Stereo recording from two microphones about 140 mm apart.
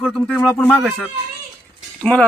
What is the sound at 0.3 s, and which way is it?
Speech, 10° left (ahead or behind).